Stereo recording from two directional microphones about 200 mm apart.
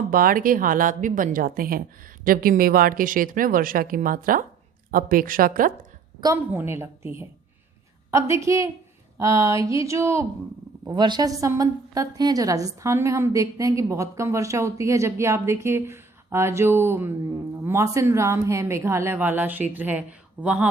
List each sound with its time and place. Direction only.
0.1 s a woman's voice: 45° right (ahead or behind)
6.1 s a woman's voice: 15° right (ahead or behind)